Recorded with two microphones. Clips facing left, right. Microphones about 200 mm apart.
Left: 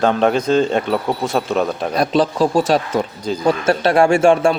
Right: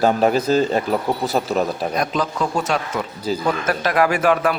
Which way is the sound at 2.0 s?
30° left (ahead or behind).